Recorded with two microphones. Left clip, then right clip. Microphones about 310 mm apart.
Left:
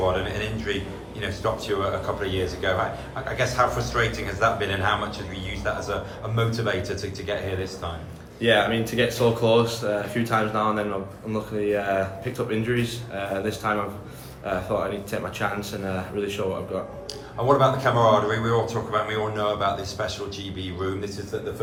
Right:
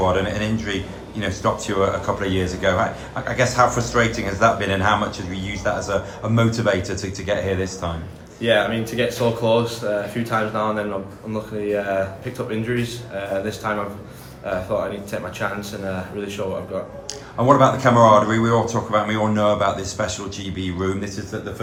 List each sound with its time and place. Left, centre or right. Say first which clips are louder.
0.1 s a sound: right 5 dB; right
1.2 s speech: right 5 dB; centre
8.4 s speech: right 2 dB; centre
17.4 s speech: right 5 dB; right